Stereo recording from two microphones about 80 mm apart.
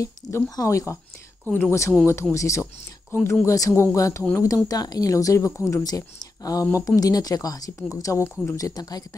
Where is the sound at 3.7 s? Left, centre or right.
Left.